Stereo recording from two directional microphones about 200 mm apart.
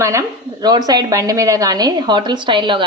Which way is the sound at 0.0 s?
15° right (ahead or behind).